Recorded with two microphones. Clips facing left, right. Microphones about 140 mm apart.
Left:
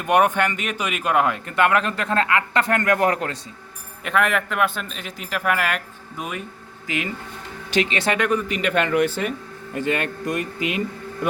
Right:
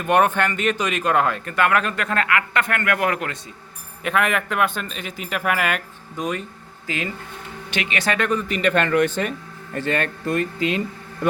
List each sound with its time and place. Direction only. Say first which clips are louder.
0.0 s speech: even; 15° left (ahead or behind); by 3.3 s 35° left (ahead or behind)
4.0 s speech: even; centre (ahead or behind); by 7.1 s 15° left (ahead or behind)
7.7 s speech: left 3 dB; 35° left (ahead or behind); by 11.3 s 15° left (ahead or behind)